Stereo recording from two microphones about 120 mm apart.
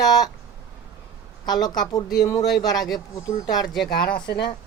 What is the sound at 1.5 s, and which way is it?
Speech, 35° left (ahead or behind).